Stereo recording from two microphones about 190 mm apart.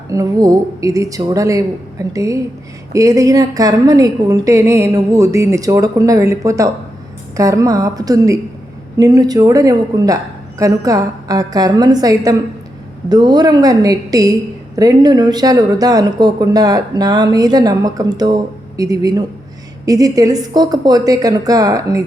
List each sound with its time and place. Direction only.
0.1 s a woman's voice: 20° right (ahead or behind)